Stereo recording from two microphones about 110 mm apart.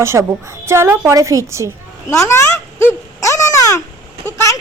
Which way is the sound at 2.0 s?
25° left (ahead or behind).